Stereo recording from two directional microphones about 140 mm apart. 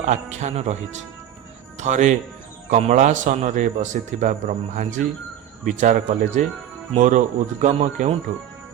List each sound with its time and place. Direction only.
0.0 s speech: 55° right (ahead or behind)
1.8 s a man's voice: 60° right (ahead or behind)